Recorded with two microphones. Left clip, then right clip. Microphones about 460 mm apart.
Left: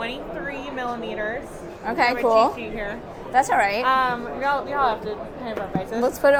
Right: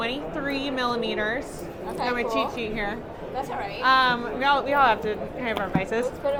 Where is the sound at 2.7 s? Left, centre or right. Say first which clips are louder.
Even; centre.